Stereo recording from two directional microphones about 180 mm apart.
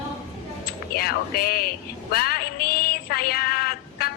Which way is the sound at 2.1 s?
55° left (ahead or behind).